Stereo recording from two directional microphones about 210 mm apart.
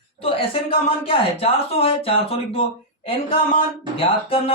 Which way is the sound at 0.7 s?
25° left (ahead or behind).